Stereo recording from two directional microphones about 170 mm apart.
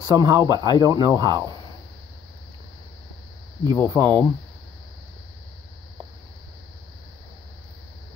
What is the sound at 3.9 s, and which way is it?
Speech, 20° right (ahead or behind).